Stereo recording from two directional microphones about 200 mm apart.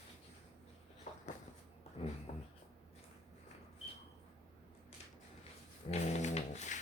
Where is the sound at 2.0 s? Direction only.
30° left (ahead or behind).